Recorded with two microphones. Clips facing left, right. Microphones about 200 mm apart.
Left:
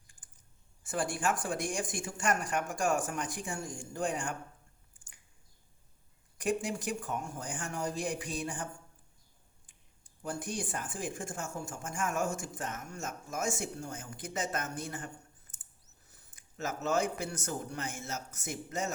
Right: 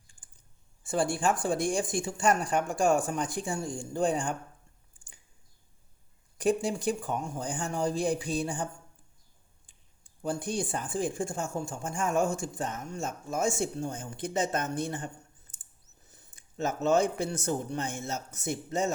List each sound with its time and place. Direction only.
0.9 s speech: 25° right (ahead or behind)
6.3 s speech: 30° right (ahead or behind)
10.2 s a man's voice: 25° right (ahead or behind)